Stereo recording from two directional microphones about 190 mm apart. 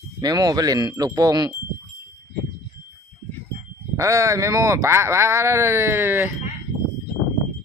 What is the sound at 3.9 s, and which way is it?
Speech, 15° right (ahead or behind).